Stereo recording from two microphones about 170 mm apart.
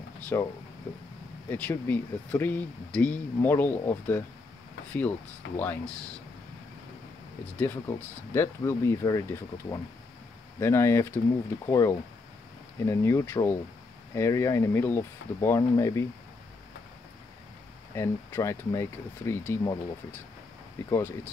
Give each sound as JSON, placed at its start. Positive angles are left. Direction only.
{"t": 0.3, "sound": "speech", "side_deg": 15}
{"t": 1.5, "sound": "speech", "side_deg": 10}
{"t": 5.6, "sound": "speech", "side_deg": 10}
{"t": 7.5, "sound": "speech", "side_deg": 10}
{"t": 17.9, "sound": "speech", "side_deg": 15}
{"t": 20.9, "sound": "speech", "side_deg": 15}